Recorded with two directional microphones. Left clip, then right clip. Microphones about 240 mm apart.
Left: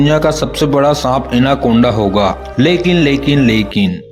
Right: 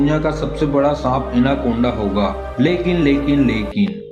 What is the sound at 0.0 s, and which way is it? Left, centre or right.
A man's voice, left.